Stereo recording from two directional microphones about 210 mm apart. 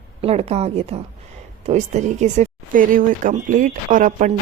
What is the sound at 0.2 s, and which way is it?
A woman's voice, 30° right (ahead or behind).